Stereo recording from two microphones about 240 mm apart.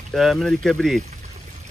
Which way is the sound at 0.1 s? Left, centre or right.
Centre.